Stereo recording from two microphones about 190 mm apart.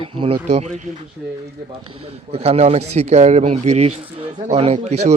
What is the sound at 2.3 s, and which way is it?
A man's voice, 30° right (ahead or behind).